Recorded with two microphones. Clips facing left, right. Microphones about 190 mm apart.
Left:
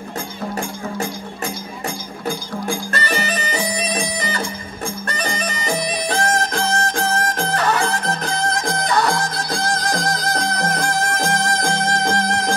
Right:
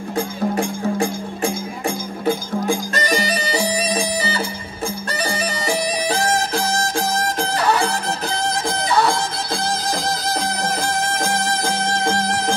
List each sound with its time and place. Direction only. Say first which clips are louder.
2.2 s music: right 4 dB; 20° right (ahead or behind)
3.0 s bagpipes: right 2 dB; 40° right (ahead or behind)
3.5 s music: right 3 dB; 10° right (ahead or behind)
5.0 s bagpipes: right 1 dB; 10° right (ahead or behind)
6.5 s music: even; 10° right (ahead or behind)
9.2 s music: left 1 dB; 5° right (ahead or behind)